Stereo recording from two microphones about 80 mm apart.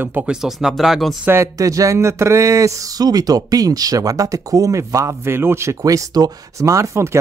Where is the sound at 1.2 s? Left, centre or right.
Right.